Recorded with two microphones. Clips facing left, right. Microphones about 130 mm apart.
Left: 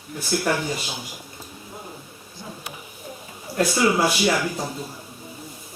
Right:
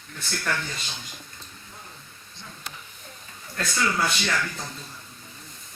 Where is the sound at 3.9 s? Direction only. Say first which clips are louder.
Left 7 dB; 10° left (ahead or behind).